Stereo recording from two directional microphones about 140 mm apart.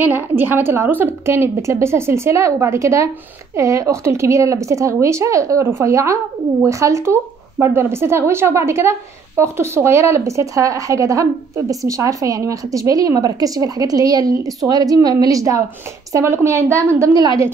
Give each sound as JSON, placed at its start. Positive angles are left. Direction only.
{"t": 0.0, "sound": "a woman's voice", "side_deg": -15}